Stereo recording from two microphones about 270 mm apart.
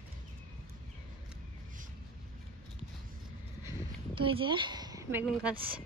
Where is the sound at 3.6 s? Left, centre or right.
Centre.